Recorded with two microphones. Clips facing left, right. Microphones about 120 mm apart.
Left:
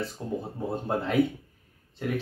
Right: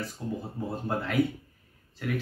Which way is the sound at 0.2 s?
40° left (ahead or behind).